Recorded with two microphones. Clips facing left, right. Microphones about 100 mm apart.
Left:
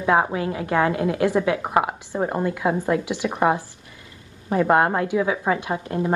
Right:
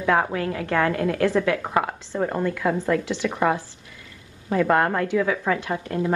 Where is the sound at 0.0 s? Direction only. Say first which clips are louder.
Left 2 dB; 25° left (ahead or behind).